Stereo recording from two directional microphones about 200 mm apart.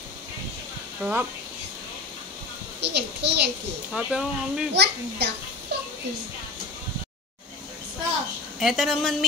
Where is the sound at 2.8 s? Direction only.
55° right (ahead or behind).